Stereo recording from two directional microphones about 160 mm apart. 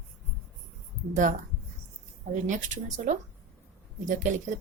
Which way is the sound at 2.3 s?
50° right (ahead or behind).